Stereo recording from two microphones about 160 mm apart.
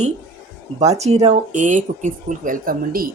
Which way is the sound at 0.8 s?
45° right (ahead or behind).